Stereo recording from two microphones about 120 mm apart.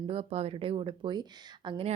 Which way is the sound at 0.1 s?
55° right (ahead or behind).